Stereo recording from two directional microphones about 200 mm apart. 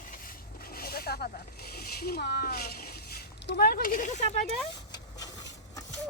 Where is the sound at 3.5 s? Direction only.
50° left (ahead or behind); by 4.4 s 35° left (ahead or behind).